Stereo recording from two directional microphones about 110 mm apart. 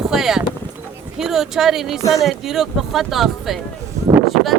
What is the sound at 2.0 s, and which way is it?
Speech, 30° left (ahead or behind).